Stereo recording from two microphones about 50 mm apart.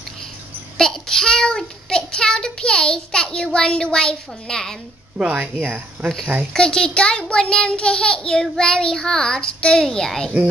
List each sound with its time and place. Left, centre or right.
0.7 s child singing: centre
5.2 s speech: right
6.5 s child singing: centre